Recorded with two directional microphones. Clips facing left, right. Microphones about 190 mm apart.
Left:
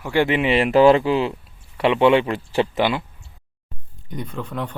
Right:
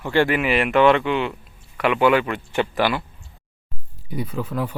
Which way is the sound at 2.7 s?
20° left (ahead or behind).